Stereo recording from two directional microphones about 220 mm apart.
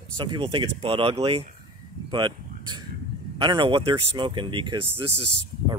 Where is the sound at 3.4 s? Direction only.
20° right (ahead or behind).